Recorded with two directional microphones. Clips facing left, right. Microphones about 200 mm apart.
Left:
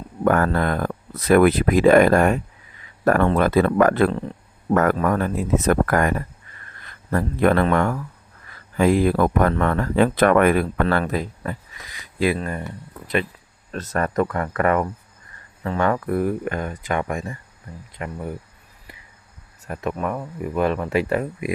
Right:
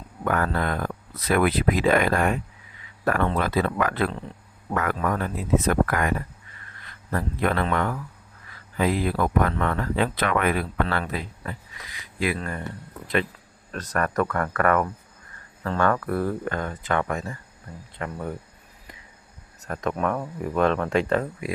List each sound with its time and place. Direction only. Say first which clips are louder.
0.3 s speech: left 6 dB; 45° left (ahead or behind)
12.3 s speech: left 5 dB; 20° left (ahead or behind)
13.7 s speech: left 3 dB; 25° left (ahead or behind); by 18.3 s 10° left (ahead or behind)
19.6 s speech: even; 10° left (ahead or behind)